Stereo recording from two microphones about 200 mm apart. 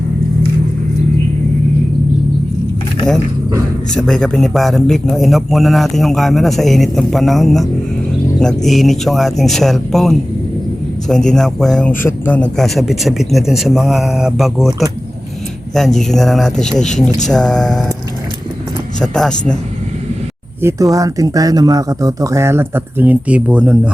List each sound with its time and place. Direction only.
3.9 s a man's voice: centre (ahead or behind)
18.9 s a man's voice: 5° left (ahead or behind)
20.6 s speech: 15° right (ahead or behind)